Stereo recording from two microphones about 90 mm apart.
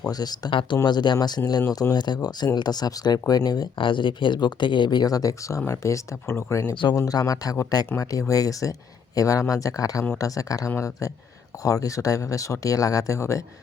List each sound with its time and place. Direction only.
0.1 s speech: 50° left (ahead or behind)
3.8 s speech: 65° left (ahead or behind); by 6.7 s 30° left (ahead or behind)
6.9 s speech: 45° left (ahead or behind)